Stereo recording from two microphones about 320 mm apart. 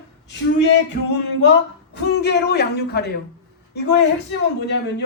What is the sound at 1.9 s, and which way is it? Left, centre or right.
Speech, left.